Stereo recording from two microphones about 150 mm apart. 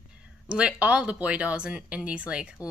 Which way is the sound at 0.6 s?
10° right (ahead or behind).